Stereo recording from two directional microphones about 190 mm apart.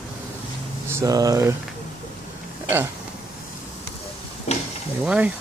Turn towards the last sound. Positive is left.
turn(degrees=-5)  # may be behind; listen again after turning